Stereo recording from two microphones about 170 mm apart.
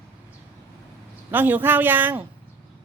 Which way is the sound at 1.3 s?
10° right (ahead or behind).